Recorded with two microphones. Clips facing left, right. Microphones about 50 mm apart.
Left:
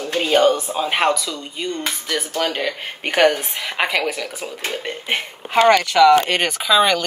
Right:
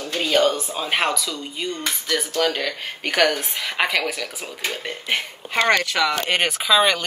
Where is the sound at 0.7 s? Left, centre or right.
Centre.